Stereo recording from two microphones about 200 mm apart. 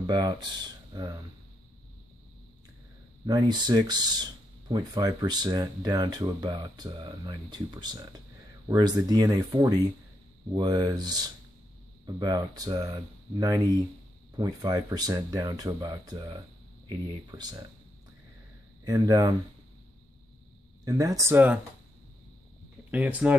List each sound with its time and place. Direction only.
0.0 s speech: 20° right (ahead or behind)
3.3 s speech: 20° right (ahead or behind)
18.9 s speech: 20° right (ahead or behind)
20.8 s speech: 15° right (ahead or behind)
22.8 s speech: 5° right (ahead or behind)